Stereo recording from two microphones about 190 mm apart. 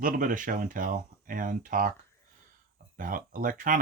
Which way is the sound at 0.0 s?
45° right (ahead or behind).